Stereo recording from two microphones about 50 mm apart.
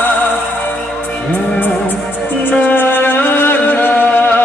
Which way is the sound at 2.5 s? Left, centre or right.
Left.